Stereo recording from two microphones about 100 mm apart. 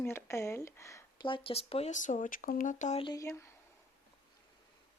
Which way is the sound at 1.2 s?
55° left (ahead or behind).